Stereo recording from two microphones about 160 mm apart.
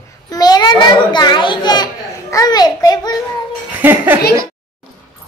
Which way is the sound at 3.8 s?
15° right (ahead or behind).